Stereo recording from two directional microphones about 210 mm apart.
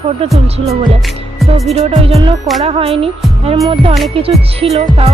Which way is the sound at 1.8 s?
30° right (ahead or behind).